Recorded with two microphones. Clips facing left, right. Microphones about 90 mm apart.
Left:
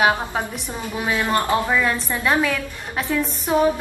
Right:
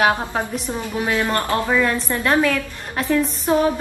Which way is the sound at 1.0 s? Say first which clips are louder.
Left 1 dB; 15° left (ahead or behind).